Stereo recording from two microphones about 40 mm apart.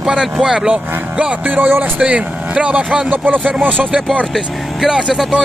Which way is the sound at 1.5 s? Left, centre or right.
Right.